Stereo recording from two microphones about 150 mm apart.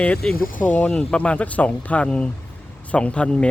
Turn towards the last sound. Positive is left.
turn(degrees=5)  # may be behind; listen again after turning